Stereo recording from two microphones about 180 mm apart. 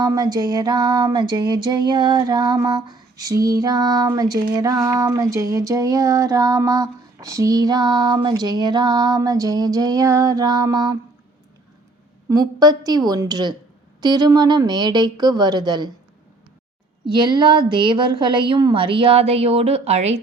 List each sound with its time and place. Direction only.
0.0 s music: 20° right (ahead or behind)
12.3 s music: 20° right (ahead or behind)
17.1 s music: 25° right (ahead or behind)